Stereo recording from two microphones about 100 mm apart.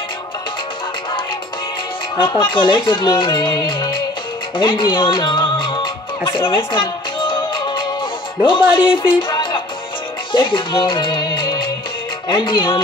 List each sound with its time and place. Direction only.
2.1 s speech: 55° left (ahead or behind)
4.6 s music: 55° left (ahead or behind)
8.5 s speech: 55° left (ahead or behind)
10.3 s music: 55° left (ahead or behind)